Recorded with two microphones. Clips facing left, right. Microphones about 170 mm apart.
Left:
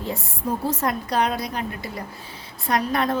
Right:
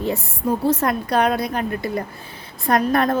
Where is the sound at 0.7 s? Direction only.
65° right (ahead or behind).